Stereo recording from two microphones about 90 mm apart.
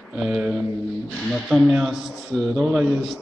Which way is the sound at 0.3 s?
10° right (ahead or behind).